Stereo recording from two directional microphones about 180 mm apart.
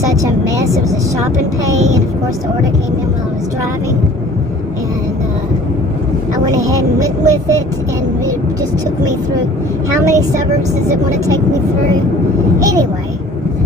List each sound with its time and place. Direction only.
0.4 s speech: 20° right (ahead or behind)
6.4 s speech: 20° right (ahead or behind)
10.0 s speech: 20° right (ahead or behind)
12.5 s speech: 20° right (ahead or behind)